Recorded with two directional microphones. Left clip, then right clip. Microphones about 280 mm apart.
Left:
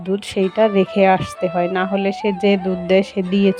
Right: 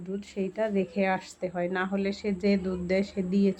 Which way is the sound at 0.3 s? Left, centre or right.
Left.